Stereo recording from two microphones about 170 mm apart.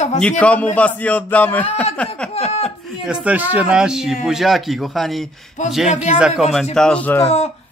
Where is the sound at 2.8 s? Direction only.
5° right (ahead or behind).